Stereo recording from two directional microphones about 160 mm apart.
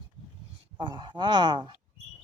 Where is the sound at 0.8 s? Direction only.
30° right (ahead or behind).